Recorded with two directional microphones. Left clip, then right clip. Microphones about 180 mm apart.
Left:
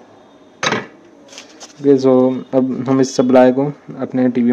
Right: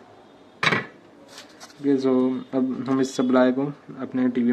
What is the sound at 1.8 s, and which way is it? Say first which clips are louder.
Speech: left 10 dB; 40° left (ahead or behind).